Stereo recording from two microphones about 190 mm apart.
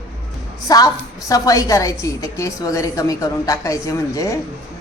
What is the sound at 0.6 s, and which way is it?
A woman's voice, 20° left (ahead or behind).